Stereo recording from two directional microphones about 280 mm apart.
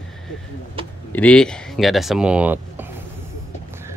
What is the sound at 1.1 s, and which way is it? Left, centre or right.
Speech, centre.